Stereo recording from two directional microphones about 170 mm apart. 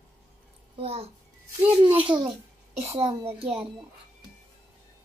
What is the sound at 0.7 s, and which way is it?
Speech, 35° right (ahead or behind).